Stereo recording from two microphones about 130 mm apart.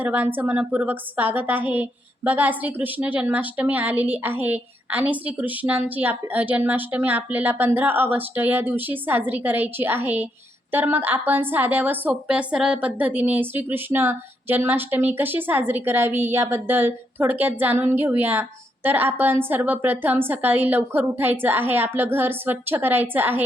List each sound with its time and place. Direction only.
0.0 s a woman's voice: 10° right (ahead or behind)